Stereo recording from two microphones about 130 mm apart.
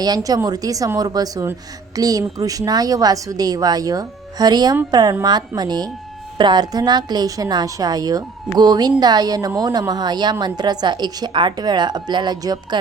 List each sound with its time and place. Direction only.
0.0 s a woman's voice: 30° right (ahead or behind)